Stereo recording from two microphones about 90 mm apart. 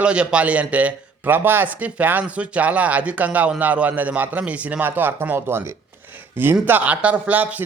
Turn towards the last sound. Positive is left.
turn(degrees=-15)  # may be behind; listen again after turning